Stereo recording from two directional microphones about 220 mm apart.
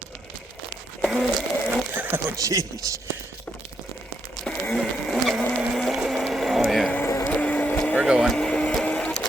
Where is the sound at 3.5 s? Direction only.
5° left (ahead or behind).